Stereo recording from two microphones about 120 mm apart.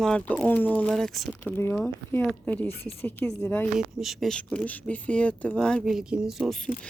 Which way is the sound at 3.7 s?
Centre (ahead or behind).